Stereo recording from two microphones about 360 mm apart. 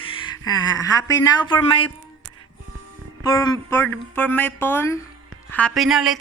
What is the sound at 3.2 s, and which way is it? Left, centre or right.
A woman's voice, centre.